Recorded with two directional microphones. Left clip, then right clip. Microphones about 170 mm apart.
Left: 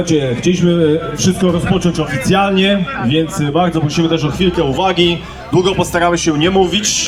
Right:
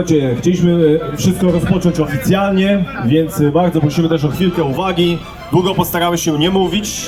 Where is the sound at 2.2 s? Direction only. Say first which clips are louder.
Left 3 dB; 35° right (ahead or behind).